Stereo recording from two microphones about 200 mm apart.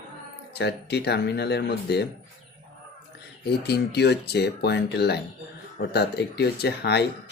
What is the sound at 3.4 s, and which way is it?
Speech, 55° left (ahead or behind).